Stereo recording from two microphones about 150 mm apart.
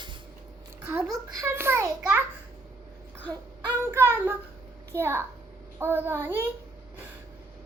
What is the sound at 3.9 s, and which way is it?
A child's voice, 15° right (ahead or behind).